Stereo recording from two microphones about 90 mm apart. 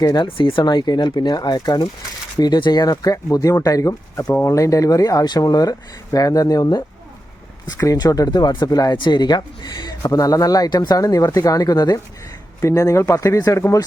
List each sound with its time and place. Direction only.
0.0 s speech: 45° left (ahead or behind)
0.3 s speech: 75° left (ahead or behind); by 13.7 s 35° left (ahead or behind)